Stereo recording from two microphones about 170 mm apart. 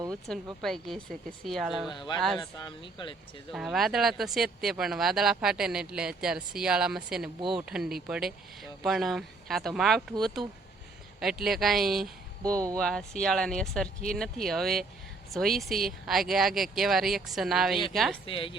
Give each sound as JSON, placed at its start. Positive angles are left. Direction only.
{"t": 0.3, "sound": "speech", "side_deg": 5}
{"t": 1.9, "sound": "speech", "side_deg": 30}
{"t": 3.5, "sound": "speech", "side_deg": 0}
{"t": 18.3, "sound": "a woman's voice", "side_deg": 30}